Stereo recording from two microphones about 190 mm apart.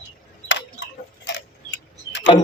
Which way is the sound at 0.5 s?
75° left (ahead or behind).